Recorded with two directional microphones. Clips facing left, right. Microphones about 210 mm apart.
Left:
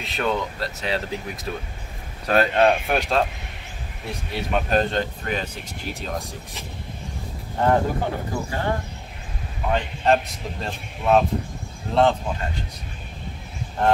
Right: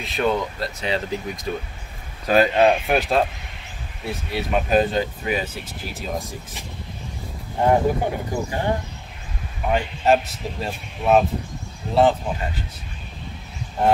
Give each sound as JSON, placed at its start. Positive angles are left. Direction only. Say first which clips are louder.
{"t": 0.0, "sound": "speech", "louder": "right 3 dB", "side_deg": 0}
{"t": 7.6, "sound": "speech", "louder": "right 2 dB", "side_deg": -15}